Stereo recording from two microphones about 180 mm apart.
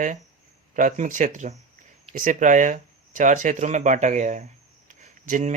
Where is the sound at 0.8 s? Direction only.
50° right (ahead or behind).